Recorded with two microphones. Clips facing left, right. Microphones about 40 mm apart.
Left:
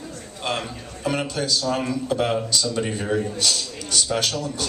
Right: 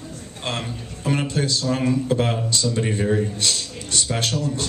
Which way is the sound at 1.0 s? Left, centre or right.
Right.